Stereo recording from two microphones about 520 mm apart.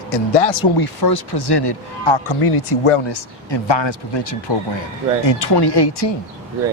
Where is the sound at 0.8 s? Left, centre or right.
Left.